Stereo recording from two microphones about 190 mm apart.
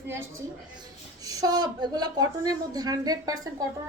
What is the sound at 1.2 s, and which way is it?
A woman's voice, 20° right (ahead or behind).